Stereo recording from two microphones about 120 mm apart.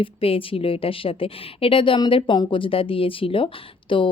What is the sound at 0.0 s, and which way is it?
Speech, 50° left (ahead or behind).